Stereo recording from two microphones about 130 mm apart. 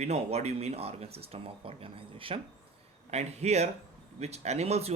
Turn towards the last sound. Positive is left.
turn(degrees=-50)  # may be behind; listen again after turning